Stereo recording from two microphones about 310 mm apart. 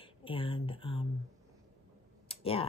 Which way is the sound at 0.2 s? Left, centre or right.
Centre.